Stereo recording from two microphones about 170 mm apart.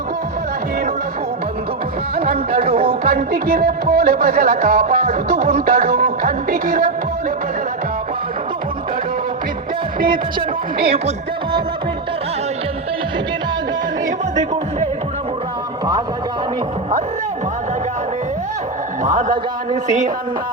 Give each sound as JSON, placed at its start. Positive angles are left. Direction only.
{"t": 2.3, "sound": "music", "side_deg": -65}
{"t": 19.0, "sound": "speech", "side_deg": -50}